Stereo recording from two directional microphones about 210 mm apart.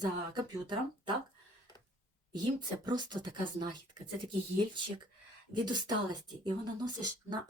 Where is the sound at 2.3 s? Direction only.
20° right (ahead or behind).